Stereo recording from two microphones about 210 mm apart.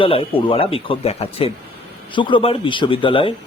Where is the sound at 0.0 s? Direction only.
25° left (ahead or behind).